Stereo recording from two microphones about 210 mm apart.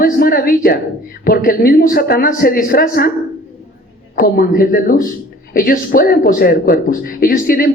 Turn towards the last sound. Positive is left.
turn(degrees=45)  # may be behind; listen again after turning